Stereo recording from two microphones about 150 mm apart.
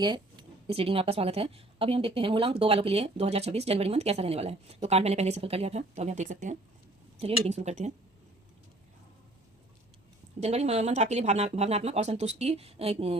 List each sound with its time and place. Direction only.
0.0 s speech: 30° right (ahead or behind); by 6.6 s 55° right (ahead or behind)
7.2 s speech: 40° right (ahead or behind)
10.4 s speech: 45° right (ahead or behind)